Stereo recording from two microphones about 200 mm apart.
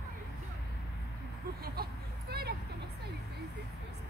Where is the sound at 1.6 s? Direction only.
50° right (ahead or behind).